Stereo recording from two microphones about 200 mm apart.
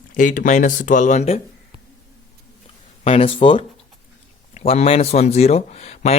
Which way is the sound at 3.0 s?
30° left (ahead or behind).